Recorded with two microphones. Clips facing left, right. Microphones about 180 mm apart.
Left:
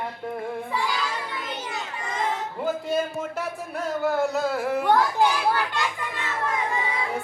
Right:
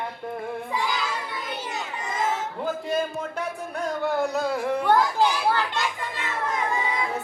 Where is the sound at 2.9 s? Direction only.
5° left (ahead or behind).